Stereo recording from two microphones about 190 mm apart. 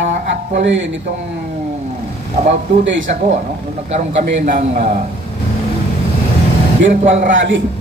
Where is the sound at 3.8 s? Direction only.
35° right (ahead or behind).